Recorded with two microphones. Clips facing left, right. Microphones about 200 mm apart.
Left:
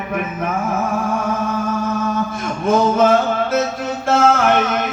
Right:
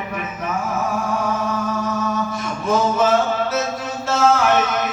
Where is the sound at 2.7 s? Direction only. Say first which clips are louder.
Left 4 dB; 55° left (ahead or behind).